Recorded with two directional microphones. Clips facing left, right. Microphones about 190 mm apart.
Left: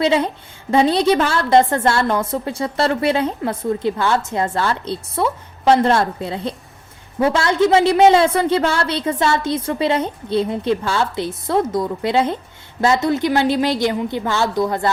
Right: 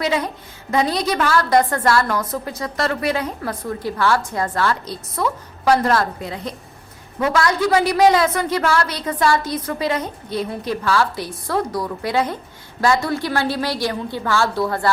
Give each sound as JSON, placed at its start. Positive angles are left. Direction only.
{"t": 0.0, "sound": "a woman's voice", "side_deg": 25}